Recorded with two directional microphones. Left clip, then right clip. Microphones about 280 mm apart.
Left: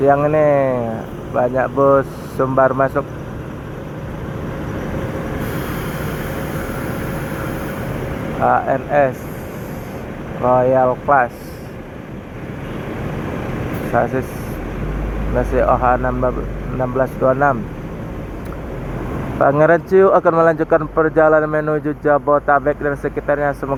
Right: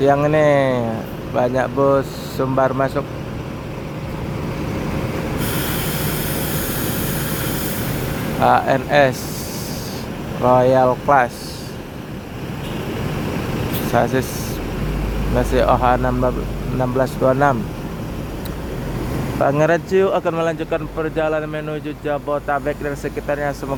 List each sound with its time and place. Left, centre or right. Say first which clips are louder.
0.0 s speech: left 1 dB; right
8.4 s speech: right 1 dB; right
10.4 s speech: even; right
13.9 s speech: even; right
15.4 s speech: left 1 dB; right
19.4 s speech: left 4 dB; centre